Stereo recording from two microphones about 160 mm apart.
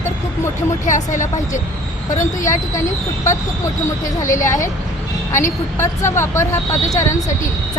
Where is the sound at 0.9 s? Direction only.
50° left (ahead or behind).